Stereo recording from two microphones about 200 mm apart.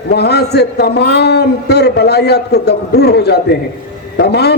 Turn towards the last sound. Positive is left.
turn(degrees=55)  # may be behind; listen again after turning